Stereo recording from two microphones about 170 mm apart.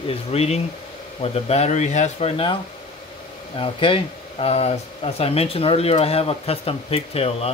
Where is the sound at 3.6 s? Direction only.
30° left (ahead or behind).